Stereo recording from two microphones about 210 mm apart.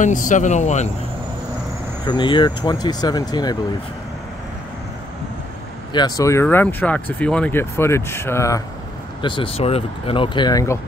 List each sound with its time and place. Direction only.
0.0 s speech: 35° left (ahead or behind)
2.0 s speech: 20° left (ahead or behind)
5.9 s speech: 20° left (ahead or behind)